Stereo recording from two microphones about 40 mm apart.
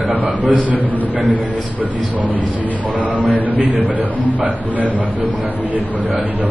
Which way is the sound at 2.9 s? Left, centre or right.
Right.